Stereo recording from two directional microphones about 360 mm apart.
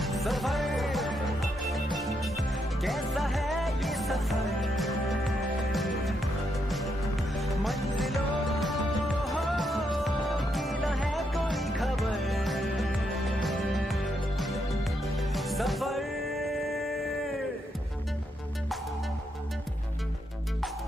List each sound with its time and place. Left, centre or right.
0.0 s music: centre
7.3 s music: centre
15.1 s music: centre